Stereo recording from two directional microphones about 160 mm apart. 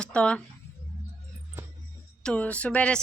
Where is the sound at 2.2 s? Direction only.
5° left (ahead or behind).